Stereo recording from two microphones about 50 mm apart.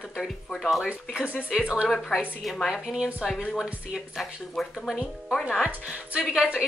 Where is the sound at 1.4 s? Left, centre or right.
Centre.